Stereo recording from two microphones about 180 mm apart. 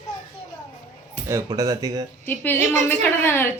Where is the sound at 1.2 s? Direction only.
20° right (ahead or behind).